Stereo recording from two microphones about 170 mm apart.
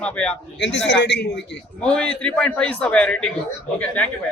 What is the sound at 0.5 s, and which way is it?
Speech, 90° left.